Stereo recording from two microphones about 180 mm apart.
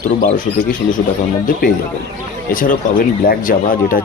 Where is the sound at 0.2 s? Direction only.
45° left (ahead or behind).